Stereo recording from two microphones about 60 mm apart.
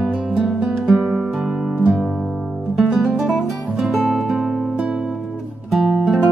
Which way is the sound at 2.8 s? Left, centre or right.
Centre.